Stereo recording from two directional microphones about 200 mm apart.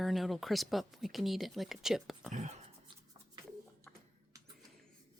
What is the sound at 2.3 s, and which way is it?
Speech, 35° right (ahead or behind).